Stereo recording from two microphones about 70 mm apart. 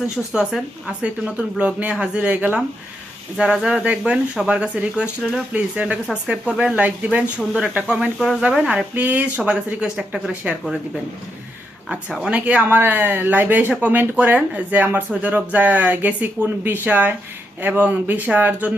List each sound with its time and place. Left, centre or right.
0.5 s speech: centre
3.3 s speech: centre
11.9 s speech: centre